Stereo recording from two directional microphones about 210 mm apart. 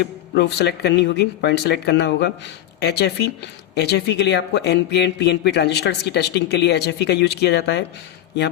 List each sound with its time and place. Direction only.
0.0 s speech: 50° left (ahead or behind)